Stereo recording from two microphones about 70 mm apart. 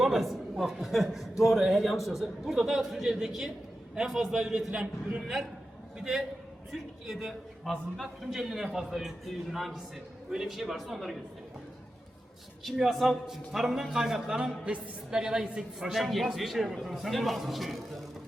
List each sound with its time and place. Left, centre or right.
0.0 s a man's voice: centre
4.7 s a man's voice: centre
6.0 s a man's voice: centre
8.4 s a man's voice: centre
12.6 s a man's voice: centre